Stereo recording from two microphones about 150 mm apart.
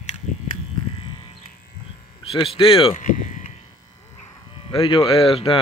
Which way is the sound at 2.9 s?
60° left (ahead or behind).